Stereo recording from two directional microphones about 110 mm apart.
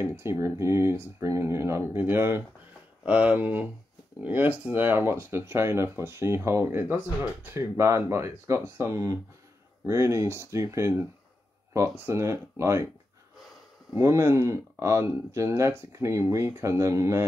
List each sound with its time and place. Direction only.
0.0 s speech: 20° right (ahead or behind)
13.9 s speech: 25° right (ahead or behind)